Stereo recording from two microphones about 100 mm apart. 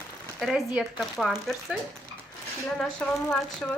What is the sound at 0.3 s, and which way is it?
Speech, centre (ahead or behind).